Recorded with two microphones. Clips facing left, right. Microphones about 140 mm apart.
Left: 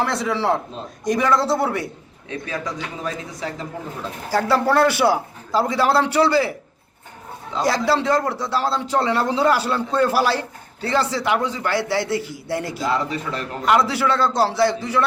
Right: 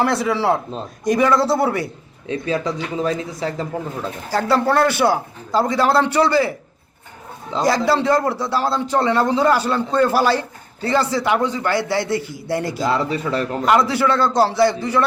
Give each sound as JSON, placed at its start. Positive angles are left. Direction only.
{"t": 0.0, "sound": "a man's voice", "side_deg": -5}
{"t": 2.2, "sound": "speech", "side_deg": -30}
{"t": 4.3, "sound": "a man's voice", "side_deg": 5}
{"t": 7.6, "sound": "a man's voice", "side_deg": 0}
{"t": 12.8, "sound": "speech", "side_deg": -30}
{"t": 13.7, "sound": "a man's voice", "side_deg": 0}